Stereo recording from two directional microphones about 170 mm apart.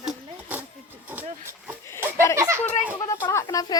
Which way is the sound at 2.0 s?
15° right (ahead or behind).